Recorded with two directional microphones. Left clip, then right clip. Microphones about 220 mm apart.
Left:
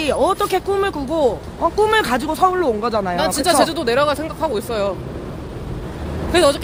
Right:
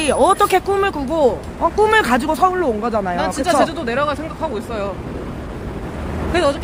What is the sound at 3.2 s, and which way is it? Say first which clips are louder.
Speech: left 1 dB; 55° left (ahead or behind).